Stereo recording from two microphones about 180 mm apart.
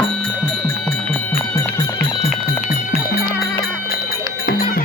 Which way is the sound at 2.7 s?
50° left (ahead or behind).